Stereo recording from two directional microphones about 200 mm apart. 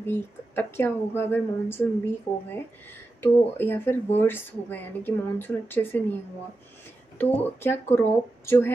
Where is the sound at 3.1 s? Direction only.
10° left (ahead or behind).